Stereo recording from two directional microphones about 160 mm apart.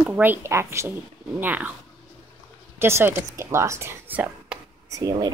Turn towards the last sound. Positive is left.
turn(degrees=-20)  # may be behind; listen again after turning